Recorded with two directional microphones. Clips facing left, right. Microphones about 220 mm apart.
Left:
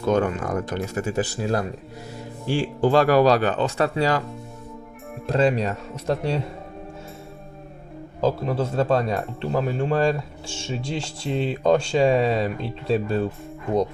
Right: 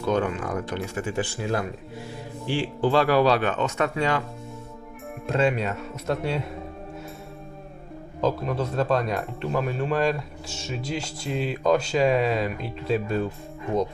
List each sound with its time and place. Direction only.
0.1 s speech: 45° left (ahead or behind)
5.2 s speech: 35° left (ahead or behind)
8.2 s speech: 30° left (ahead or behind)